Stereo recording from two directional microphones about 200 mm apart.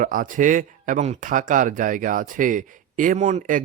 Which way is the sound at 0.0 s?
40° right (ahead or behind).